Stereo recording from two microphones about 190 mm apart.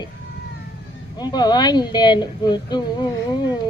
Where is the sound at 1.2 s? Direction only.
20° left (ahead or behind).